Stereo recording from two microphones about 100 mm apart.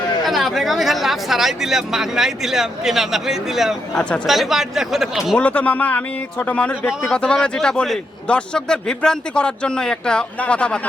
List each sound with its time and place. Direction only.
0.3 s speech: centre (ahead or behind)
5.4 s speech: 15° left (ahead or behind)